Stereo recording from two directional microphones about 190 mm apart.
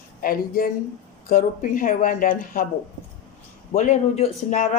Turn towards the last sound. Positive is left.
turn(degrees=35)  # may be behind; listen again after turning